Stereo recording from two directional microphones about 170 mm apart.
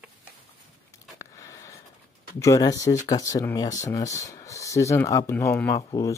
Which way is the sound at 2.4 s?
20° left (ahead or behind).